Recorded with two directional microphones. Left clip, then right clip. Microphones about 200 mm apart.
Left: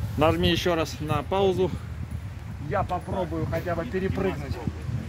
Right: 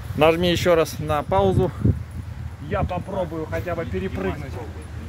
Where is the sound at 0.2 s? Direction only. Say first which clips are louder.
Right 5 dB; 40° right (ahead or behind).